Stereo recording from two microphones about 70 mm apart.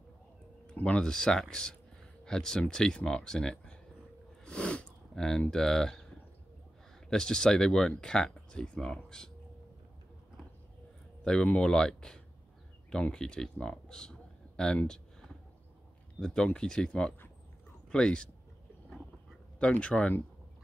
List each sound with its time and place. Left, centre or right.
0.7 s speech: centre
4.5 s sniff: centre
5.5 s speech: centre
7.1 s speech: centre
11.2 s speech: centre
16.2 s speech: centre
19.6 s speech: centre